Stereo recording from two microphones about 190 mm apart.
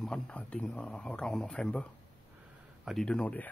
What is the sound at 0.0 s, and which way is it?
Speech, 5° left (ahead or behind).